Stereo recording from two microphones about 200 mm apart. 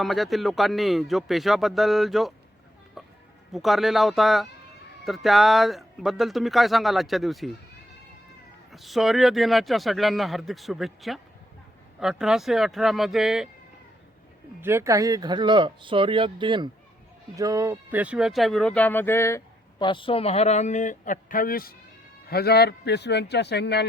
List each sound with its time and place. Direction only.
0.0 s speech: centre (ahead or behind)
3.0 s music: centre (ahead or behind)
3.5 s speech: centre (ahead or behind)
8.7 s speech: centre (ahead or behind)
14.6 s speech: 10° right (ahead or behind); by 19.4 s 15° left (ahead or behind)
19.8 s speech: 25° left (ahead or behind); by 23.8 s 55° left (ahead or behind)